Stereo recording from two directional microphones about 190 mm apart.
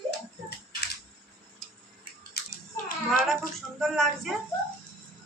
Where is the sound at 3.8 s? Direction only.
Centre (ahead or behind).